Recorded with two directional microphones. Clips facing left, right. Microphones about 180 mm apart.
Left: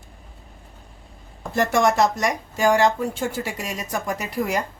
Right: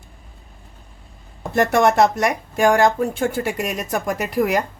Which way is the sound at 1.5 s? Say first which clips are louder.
Right 3 dB; 60° right (ahead or behind).